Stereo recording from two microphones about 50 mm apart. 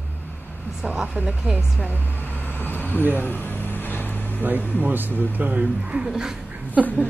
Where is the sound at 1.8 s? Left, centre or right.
Left.